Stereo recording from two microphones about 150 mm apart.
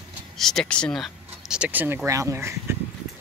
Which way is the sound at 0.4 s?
5° left (ahead or behind).